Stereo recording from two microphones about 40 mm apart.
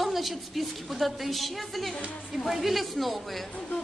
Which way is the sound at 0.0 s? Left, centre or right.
Centre.